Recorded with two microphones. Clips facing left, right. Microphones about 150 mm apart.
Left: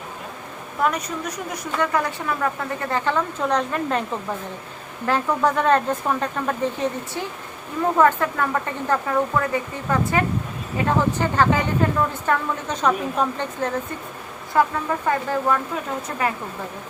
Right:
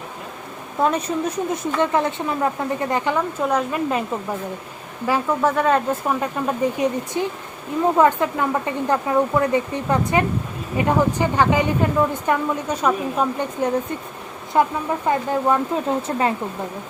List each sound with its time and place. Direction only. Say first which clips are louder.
0.8 s speech: right 4 dB; 30° right (ahead or behind); by 4.0 s 5° right (ahead or behind)
5.0 s a woman's voice: right 1 dB; 10° right (ahead or behind); by 16.3 s 30° right (ahead or behind)